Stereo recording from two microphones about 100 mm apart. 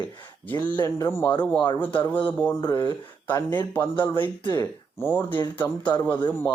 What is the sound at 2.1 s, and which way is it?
Speech, 15° left (ahead or behind).